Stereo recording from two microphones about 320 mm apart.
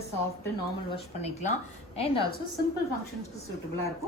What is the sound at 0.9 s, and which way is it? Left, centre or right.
A woman's voice, centre.